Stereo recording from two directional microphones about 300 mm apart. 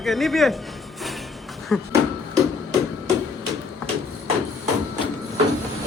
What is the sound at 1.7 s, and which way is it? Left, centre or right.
Speech, centre.